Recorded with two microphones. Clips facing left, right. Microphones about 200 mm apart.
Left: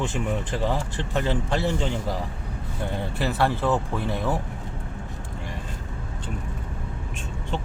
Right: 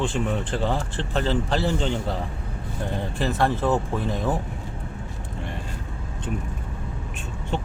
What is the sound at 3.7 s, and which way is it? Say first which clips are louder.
Speech: right 1 dB; 20° right (ahead or behind).